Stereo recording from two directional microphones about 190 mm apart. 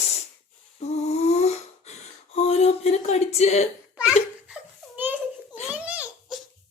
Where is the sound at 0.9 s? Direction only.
35° left (ahead or behind).